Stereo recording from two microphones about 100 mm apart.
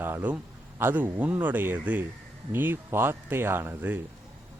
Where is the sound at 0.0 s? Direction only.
20° right (ahead or behind).